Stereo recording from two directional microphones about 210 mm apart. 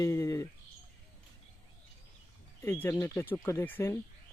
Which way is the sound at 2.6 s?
10° left (ahead or behind).